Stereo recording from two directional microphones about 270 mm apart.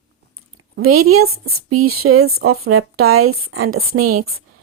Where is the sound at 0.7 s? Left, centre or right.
Right.